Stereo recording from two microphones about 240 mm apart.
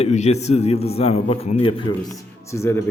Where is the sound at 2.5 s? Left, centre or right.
Centre.